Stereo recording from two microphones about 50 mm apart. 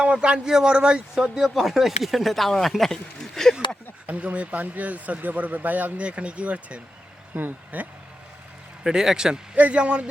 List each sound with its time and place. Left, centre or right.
0.0 s speech: right; by 3.5 s centre
4.0 s speech: right
6.1 s speech: right
7.3 s speech: right
8.8 s a man's voice: centre
9.6 s speech: right